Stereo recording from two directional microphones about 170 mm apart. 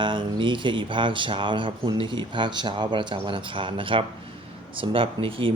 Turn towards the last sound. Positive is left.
turn(degrees=-30)  # may be behind; listen again after turning